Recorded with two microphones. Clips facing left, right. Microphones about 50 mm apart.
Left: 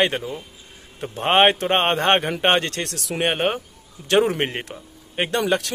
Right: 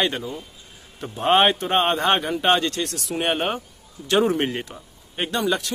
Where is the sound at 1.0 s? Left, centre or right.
Left.